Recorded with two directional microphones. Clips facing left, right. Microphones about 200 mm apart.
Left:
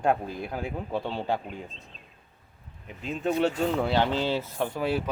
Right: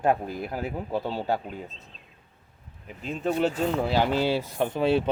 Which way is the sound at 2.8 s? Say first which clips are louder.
Even; centre (ahead or behind).